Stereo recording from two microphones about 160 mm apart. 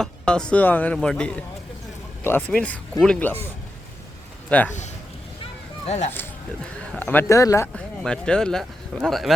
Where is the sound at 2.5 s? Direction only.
5° left (ahead or behind).